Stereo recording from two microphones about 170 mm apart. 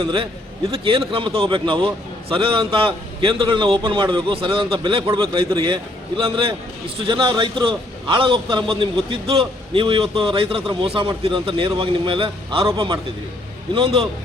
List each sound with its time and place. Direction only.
0.0 s a man's voice: 30° right (ahead or behind)